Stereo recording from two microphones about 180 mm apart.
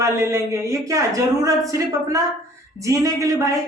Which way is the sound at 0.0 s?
15° right (ahead or behind).